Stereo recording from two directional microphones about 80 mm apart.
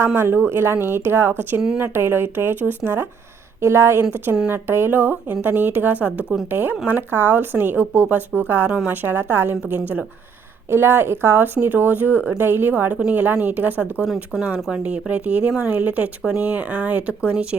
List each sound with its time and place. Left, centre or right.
0.1 s speech: right
14.0 s speech: centre